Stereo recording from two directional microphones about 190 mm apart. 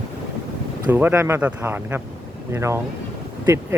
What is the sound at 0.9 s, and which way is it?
Speech, 10° right (ahead or behind).